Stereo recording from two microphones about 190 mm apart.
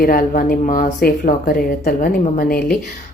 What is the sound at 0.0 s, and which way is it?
A woman's voice, 50° left (ahead or behind).